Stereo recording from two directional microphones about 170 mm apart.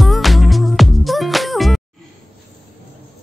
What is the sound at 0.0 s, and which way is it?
Music, centre (ahead or behind).